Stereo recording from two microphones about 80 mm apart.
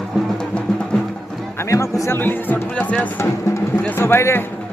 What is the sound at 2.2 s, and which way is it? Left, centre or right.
Speech, left.